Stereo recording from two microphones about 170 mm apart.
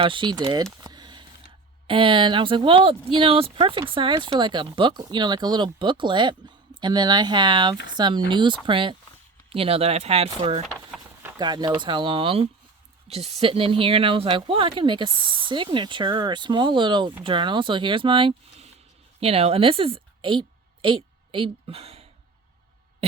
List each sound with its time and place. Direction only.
0.0 s speech: 30° right (ahead or behind)
11.3 s a woman's voice: 25° right (ahead or behind)